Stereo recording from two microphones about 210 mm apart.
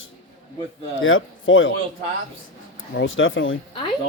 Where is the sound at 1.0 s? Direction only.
70° left (ahead or behind).